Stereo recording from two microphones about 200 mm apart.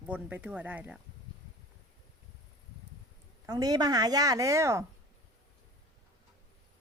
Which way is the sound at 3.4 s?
20° right (ahead or behind).